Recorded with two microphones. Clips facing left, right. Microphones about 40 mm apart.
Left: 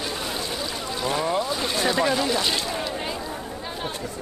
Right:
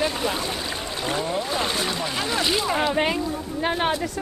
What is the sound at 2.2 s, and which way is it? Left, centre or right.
Speech, centre.